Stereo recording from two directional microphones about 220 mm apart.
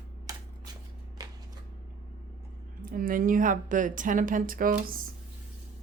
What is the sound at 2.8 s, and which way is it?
A woman's voice, 40° right (ahead or behind).